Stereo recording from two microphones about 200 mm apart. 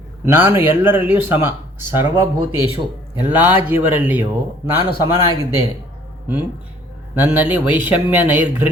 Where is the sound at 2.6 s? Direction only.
25° left (ahead or behind).